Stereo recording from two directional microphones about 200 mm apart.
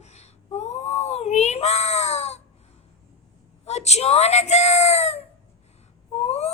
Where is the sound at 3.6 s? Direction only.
35° left (ahead or behind).